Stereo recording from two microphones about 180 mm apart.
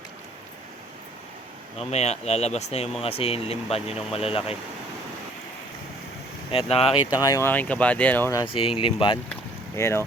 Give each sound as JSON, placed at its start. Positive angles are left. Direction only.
{"t": 1.9, "sound": "speech", "side_deg": 35}
{"t": 6.5, "sound": "speech", "side_deg": 35}
{"t": 8.5, "sound": "speech", "side_deg": 30}
{"t": 9.3, "sound": "boat", "side_deg": 15}